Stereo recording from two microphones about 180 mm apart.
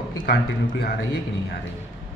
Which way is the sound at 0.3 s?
60° left (ahead or behind).